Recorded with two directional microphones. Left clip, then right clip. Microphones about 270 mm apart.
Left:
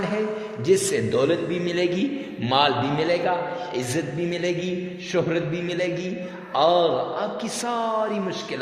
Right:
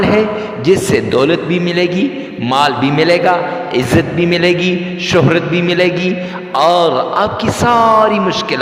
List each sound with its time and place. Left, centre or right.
0.6 s a man's voice: right